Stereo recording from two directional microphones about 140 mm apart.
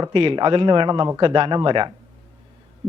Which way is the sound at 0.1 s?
35° right (ahead or behind).